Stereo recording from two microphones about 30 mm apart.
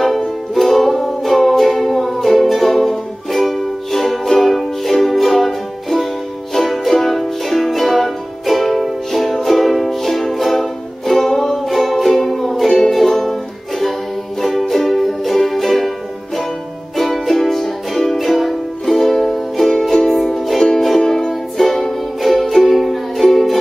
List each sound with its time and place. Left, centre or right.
0.0 s music: centre
11.5 s music: centre
12.2 s music: centre
16.9 s music: centre
21.0 s music: left
21.3 s music: centre